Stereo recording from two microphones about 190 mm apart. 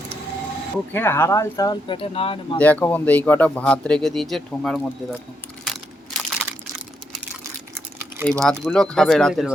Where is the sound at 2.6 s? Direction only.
10° left (ahead or behind).